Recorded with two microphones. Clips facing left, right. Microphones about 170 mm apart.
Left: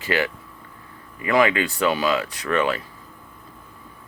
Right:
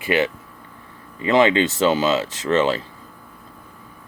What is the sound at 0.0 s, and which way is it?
Speech, 20° right (ahead or behind).